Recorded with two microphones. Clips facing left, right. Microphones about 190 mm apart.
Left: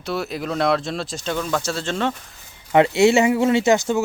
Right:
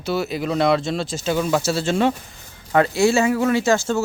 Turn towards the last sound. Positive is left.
turn(degrees=20)  # may be behind; listen again after turning